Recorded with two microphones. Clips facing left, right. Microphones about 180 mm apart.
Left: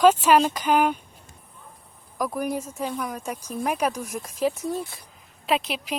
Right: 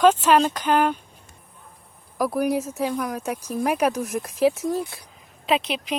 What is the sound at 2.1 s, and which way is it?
Speech, 10° right (ahead or behind).